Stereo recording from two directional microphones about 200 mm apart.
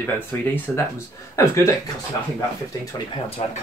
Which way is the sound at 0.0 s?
10° left (ahead or behind).